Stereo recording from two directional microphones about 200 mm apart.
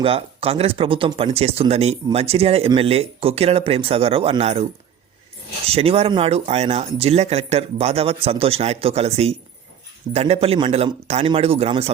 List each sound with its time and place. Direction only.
0.0 s speech: 30° right (ahead or behind)
5.6 s a man's voice: 30° right (ahead or behind)